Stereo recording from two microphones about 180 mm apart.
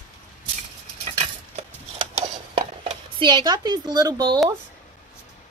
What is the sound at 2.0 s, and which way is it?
Dishes, 35° right (ahead or behind).